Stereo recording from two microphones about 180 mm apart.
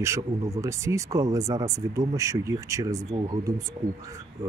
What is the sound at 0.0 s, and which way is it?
Speech, 15° right (ahead or behind).